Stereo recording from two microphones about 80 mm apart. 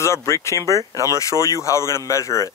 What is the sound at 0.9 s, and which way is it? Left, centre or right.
Speech, right.